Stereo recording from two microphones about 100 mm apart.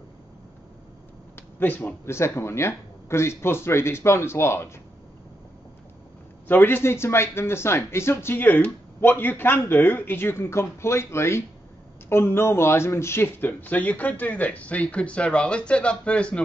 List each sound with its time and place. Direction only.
1.3 s a sound: 20° left (ahead or behind)
2.0 s speech: 25° left (ahead or behind)
6.4 s speech: 20° left (ahead or behind)